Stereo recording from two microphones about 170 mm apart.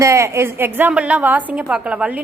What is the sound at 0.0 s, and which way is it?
A woman's voice, 15° right (ahead or behind).